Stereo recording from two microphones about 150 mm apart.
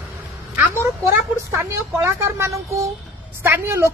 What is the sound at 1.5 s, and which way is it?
A woman's voice, 15° right (ahead or behind).